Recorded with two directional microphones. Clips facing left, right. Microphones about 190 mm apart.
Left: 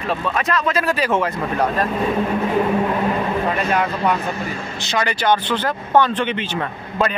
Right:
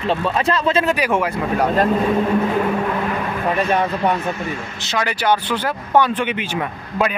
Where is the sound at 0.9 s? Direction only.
10° right (ahead or behind).